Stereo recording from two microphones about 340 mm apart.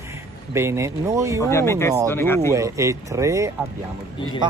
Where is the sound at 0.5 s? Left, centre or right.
Centre.